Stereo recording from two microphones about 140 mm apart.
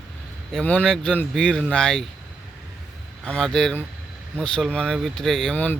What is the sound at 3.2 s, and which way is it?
Speech, 5° left (ahead or behind).